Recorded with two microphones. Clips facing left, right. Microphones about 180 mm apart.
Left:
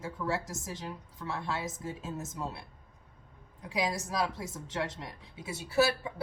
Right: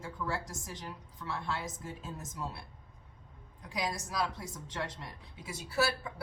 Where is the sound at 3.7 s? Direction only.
25° left (ahead or behind).